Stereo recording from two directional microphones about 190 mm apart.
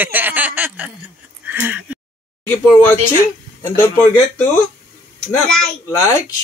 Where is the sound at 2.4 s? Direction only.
10° left (ahead or behind).